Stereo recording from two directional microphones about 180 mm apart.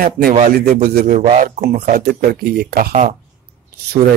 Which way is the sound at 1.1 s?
40° right (ahead or behind).